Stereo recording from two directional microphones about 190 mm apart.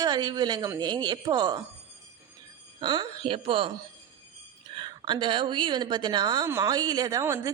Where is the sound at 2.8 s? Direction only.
20° right (ahead or behind).